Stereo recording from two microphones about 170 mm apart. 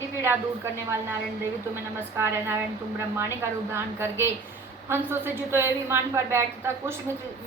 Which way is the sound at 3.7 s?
15° right (ahead or behind).